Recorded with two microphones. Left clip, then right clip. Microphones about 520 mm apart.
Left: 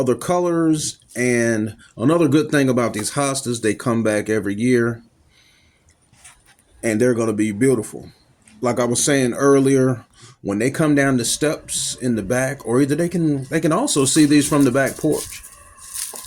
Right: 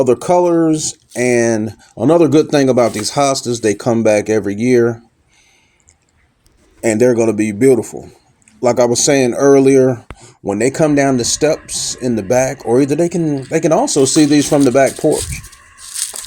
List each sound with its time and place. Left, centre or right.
0.0 s speech: left
6.8 s speech: left
16.0 s a sound: left